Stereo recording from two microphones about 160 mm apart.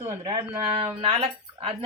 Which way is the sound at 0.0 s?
30° right (ahead or behind).